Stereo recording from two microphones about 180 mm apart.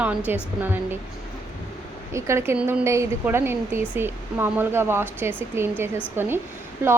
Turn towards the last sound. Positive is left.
turn(degrees=-15)  # may be behind; listen again after turning